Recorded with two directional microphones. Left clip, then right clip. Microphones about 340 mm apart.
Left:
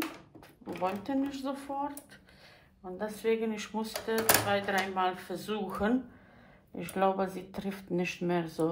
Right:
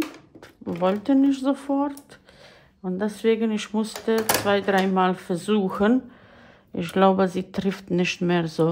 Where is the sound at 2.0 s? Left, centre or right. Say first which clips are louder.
Right 6 dB; centre.